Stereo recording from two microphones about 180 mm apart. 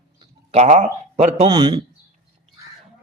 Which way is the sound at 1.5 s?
25° right (ahead or behind).